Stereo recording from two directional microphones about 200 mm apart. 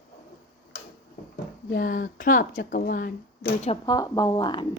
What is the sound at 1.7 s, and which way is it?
Speech, 45° left (ahead or behind).